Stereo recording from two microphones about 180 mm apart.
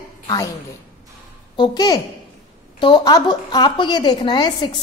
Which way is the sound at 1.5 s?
25° left (ahead or behind).